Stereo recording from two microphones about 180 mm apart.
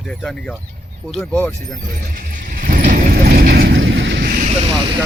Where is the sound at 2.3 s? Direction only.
50° right (ahead or behind); by 4.3 s 70° right (ahead or behind).